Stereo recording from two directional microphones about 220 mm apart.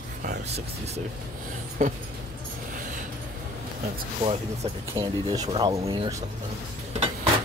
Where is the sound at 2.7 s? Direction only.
35° right (ahead or behind).